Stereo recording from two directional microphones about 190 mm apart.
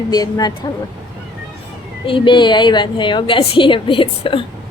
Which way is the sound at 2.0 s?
25° left (ahead or behind).